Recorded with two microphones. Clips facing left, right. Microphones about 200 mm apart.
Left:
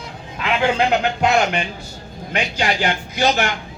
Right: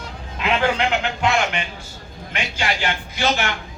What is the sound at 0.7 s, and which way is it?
Speech, 40° left (ahead or behind).